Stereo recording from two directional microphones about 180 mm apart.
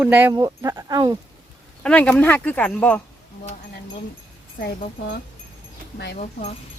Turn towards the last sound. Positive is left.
turn(degrees=40)  # may be behind; listen again after turning